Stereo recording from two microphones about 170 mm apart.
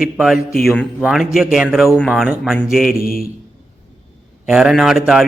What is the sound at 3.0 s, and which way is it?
Speech, 60° left (ahead or behind).